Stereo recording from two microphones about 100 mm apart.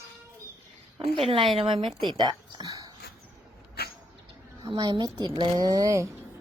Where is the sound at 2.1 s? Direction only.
45° right (ahead or behind).